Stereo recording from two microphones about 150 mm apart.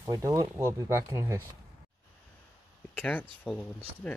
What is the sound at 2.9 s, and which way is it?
Speech, 10° left (ahead or behind).